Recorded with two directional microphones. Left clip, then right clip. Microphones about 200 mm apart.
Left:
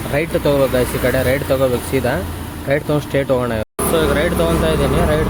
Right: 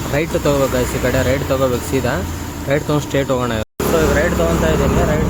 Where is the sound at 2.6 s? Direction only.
5° left (ahead or behind).